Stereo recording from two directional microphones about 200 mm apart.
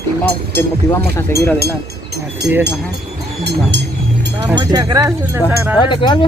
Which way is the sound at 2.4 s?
60° right (ahead or behind).